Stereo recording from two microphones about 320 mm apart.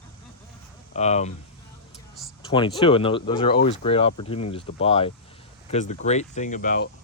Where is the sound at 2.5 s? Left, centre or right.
Centre.